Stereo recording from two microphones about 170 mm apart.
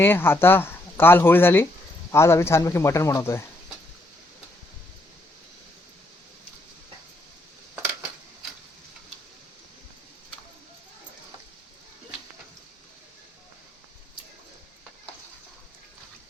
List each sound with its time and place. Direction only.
0.0 s speech: 15° left (ahead or behind)